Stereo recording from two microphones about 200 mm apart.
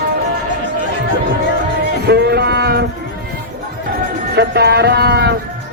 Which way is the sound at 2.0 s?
55° right (ahead or behind).